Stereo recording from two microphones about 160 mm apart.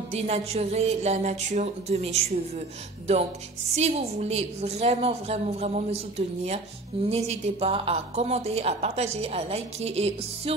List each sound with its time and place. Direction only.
0.1 s a woman's voice: 40° right (ahead or behind)
3.7 s a woman's voice: 40° right (ahead or behind)